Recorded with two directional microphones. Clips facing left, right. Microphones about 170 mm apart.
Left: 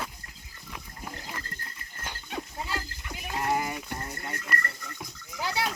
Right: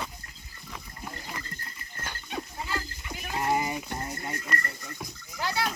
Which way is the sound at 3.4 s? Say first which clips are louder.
Right 1 dB; 5° right (ahead or behind).